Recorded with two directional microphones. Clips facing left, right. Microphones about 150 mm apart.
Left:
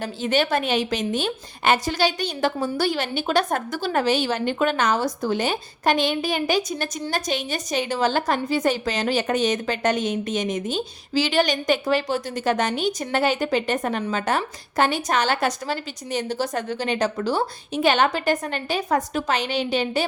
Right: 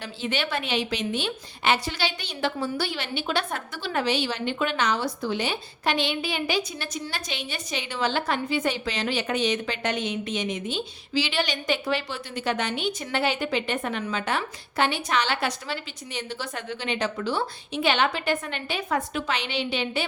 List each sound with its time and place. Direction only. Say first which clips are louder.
0.0 s a woman's voice: left 7 dB; 45° left (ahead or behind)